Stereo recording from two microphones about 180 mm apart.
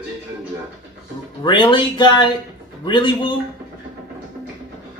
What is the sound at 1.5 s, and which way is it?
Speech, 25° left (ahead or behind).